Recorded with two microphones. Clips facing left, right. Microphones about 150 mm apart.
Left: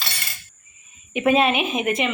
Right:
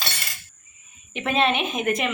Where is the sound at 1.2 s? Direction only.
10° left (ahead or behind).